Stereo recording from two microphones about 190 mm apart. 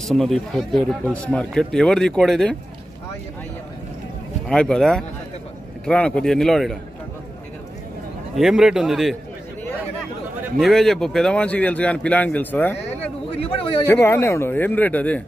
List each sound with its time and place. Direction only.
0.0 s speech: centre (ahead or behind)
4.5 s speech: 5° left (ahead or behind)
8.4 s speech: centre (ahead or behind)
10.6 s a man's voice: centre (ahead or behind)
13.4 s a man's voice: 25° left (ahead or behind)
13.8 s a man's voice: 10° left (ahead or behind)